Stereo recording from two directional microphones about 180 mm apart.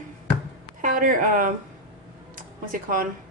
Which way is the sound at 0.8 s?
50° right (ahead or behind).